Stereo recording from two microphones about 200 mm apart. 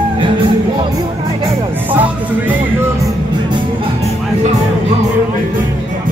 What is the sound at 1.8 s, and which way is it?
Music, 10° right (ahead or behind).